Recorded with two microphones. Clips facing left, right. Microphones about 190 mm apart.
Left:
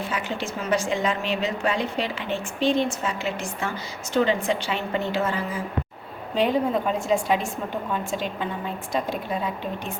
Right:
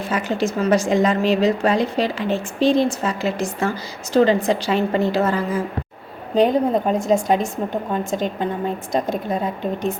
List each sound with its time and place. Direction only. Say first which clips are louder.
0.1 s a woman's voice: right 8 dB; 40° right (ahead or behind)